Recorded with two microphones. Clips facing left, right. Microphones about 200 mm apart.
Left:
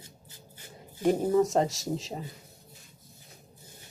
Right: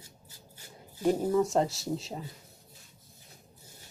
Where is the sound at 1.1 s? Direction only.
20° left (ahead or behind).